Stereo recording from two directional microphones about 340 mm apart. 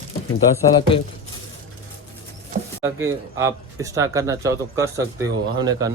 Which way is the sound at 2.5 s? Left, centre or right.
Right.